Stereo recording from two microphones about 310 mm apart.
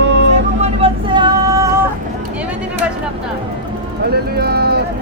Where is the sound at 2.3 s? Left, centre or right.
Centre.